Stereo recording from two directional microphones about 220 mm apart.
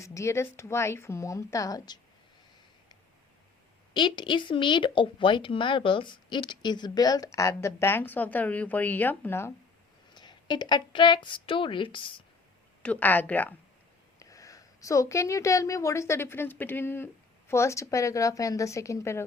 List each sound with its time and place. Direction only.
0.0 s a woman's voice: 15° left (ahead or behind)
3.9 s a woman's voice: 20° left (ahead or behind)
12.8 s a woman's voice: 5° left (ahead or behind)